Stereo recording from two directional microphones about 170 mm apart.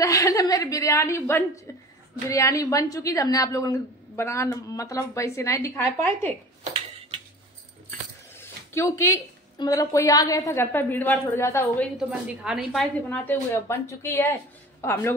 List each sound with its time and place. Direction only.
0.0 s a woman's voice: 20° left (ahead or behind)
6.6 s a sound: 35° right (ahead or behind)
8.4 s speech: 15° left (ahead or behind)
12.4 s speech: centre (ahead or behind); by 15.1 s 15° left (ahead or behind)